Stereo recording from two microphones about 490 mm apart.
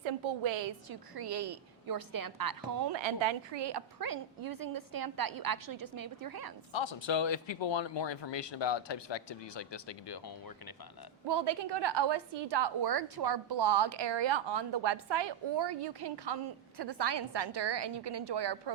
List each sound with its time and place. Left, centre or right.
0.0 s a sound: right
0.9 s a woman's voice: right
2.9 s a woman's voice: right
6.7 s speech: left
11.3 s a woman's voice: right